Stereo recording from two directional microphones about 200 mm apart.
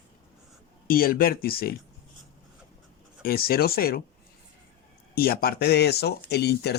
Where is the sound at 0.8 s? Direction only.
45° left (ahead or behind).